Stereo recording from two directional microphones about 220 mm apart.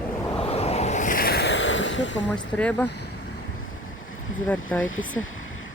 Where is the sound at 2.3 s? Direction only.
5° left (ahead or behind).